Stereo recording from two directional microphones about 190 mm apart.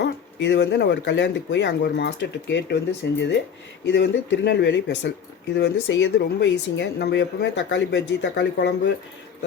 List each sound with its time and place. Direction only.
0.0 s speech: 65° left (ahead or behind)